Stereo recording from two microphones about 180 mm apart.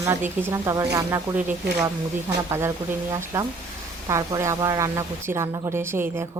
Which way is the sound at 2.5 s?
15° right (ahead or behind).